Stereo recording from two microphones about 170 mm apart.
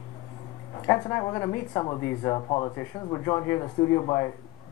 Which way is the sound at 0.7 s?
20° left (ahead or behind).